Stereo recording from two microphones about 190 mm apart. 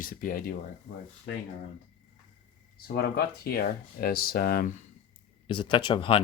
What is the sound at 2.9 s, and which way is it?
Speech, 50° left (ahead or behind).